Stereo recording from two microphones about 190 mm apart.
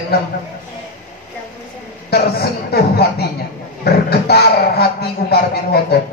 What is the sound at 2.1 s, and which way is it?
Speech, 55° left (ahead or behind).